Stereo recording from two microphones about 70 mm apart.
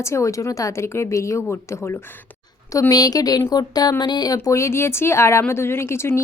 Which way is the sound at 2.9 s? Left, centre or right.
Left.